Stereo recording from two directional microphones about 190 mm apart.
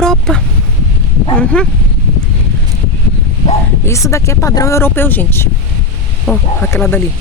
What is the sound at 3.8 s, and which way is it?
Speech, 15° left (ahead or behind).